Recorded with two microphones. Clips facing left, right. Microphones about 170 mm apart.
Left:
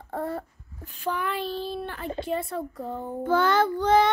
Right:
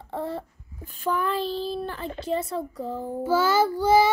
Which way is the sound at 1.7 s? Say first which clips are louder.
Right 2 dB; 35° right (ahead or behind).